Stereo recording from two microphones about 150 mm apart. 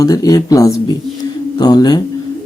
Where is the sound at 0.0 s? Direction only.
25° left (ahead or behind).